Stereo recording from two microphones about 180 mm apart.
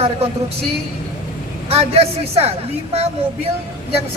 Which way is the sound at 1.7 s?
35° right (ahead or behind).